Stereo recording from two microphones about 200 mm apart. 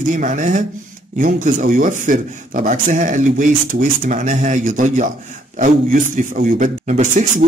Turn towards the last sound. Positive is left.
turn(degrees=-35)  # may be behind; listen again after turning